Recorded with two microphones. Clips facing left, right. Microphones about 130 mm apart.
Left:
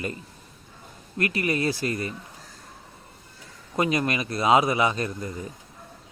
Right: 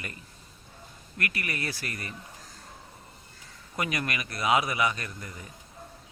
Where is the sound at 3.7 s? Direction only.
25° left (ahead or behind).